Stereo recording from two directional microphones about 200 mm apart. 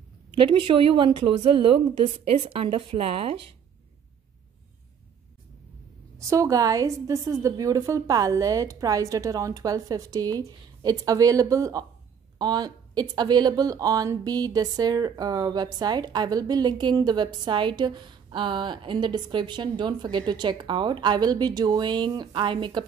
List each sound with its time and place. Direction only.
0.4 s speech: 25° right (ahead or behind)
6.1 s a woman's voice: 15° right (ahead or behind)